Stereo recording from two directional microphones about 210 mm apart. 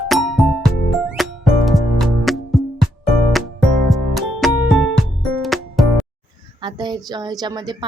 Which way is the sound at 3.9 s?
Centre (ahead or behind).